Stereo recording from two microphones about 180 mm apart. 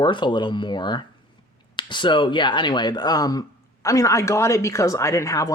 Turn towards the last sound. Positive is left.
turn(degrees=20)  # may be behind; listen again after turning